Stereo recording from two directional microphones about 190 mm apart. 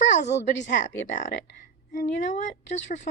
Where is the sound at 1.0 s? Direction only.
45° left (ahead or behind).